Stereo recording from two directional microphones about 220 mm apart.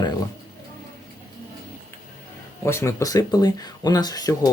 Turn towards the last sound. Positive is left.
turn(degrees=15)  # may be behind; listen again after turning